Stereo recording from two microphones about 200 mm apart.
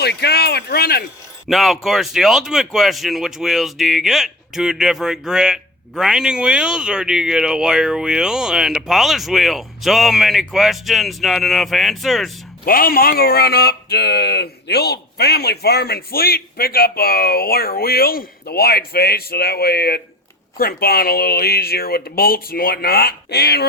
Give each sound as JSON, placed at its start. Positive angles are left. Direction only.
{"t": 0.0, "sound": "speech", "side_deg": 55}
{"t": 1.5, "sound": "speech", "side_deg": 0}
{"t": 12.6, "sound": "speech", "side_deg": 45}